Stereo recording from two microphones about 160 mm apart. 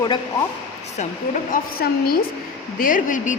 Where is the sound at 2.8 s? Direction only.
55° left (ahead or behind).